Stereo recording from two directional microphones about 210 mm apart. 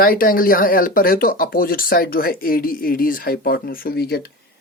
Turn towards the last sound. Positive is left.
turn(degrees=50)  # may be behind; listen again after turning